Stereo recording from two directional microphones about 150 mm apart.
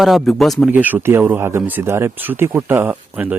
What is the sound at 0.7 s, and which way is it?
Speech, 10° right (ahead or behind).